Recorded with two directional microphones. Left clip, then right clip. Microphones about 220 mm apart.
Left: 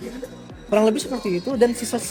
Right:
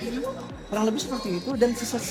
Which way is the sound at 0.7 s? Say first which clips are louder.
Left 8 dB; 35° left (ahead or behind).